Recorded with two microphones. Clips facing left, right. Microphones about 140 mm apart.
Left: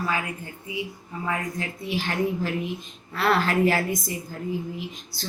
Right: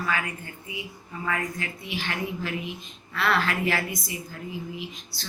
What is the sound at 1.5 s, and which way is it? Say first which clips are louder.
A woman's voice: left 4 dB; 40° left (ahead or behind).